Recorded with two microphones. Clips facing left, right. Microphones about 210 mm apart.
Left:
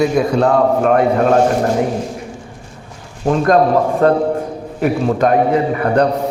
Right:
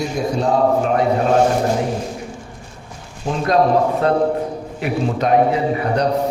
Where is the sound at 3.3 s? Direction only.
50° left (ahead or behind).